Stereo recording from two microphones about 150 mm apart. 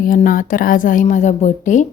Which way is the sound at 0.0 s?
65° left (ahead or behind).